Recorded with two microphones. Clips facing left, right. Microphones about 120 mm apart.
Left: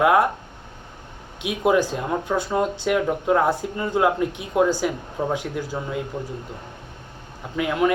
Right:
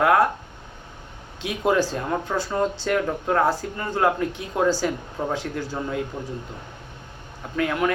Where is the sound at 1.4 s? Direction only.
15° left (ahead or behind).